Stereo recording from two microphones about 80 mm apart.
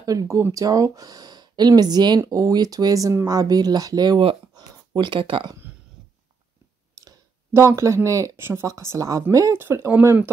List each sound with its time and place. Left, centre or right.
0.0 s speech: right
7.0 s a sound: right
8.6 s speech: right
9.5 s speech: right